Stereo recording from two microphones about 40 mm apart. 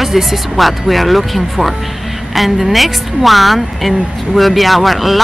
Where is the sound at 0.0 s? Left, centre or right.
Centre.